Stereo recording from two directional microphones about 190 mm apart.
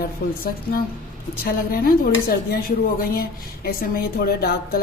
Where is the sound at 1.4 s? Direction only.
50° left (ahead or behind).